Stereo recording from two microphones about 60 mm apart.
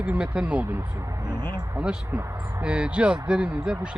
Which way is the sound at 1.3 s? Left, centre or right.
Left.